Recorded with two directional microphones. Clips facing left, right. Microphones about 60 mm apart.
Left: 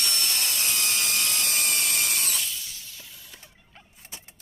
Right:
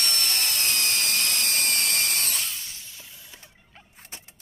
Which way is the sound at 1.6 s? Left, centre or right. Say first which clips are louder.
Right 1 dB; right.